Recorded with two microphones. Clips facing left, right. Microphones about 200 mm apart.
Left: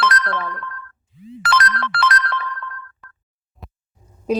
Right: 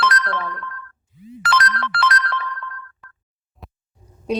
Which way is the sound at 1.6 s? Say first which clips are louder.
Left 1 dB; 55° left (ahead or behind).